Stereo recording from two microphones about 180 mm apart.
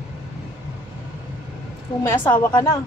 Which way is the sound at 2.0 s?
15° left (ahead or behind).